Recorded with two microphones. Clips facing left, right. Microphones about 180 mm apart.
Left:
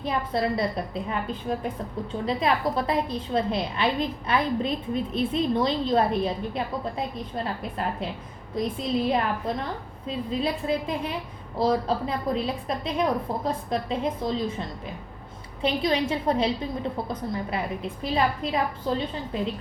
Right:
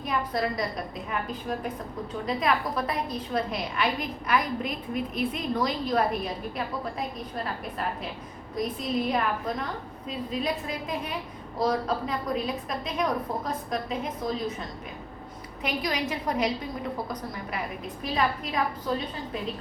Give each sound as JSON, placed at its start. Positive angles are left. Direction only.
{"t": 0.0, "sound": "a woman's voice", "side_deg": 30}
{"t": 8.5, "sound": "a woman's voice", "side_deg": 30}